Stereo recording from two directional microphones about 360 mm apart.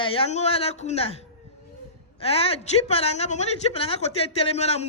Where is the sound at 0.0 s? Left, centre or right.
Centre.